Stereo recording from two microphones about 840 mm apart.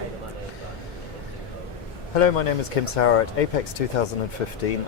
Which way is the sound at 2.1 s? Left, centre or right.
Left.